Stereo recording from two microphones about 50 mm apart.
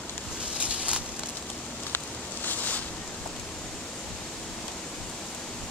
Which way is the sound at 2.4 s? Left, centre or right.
Left.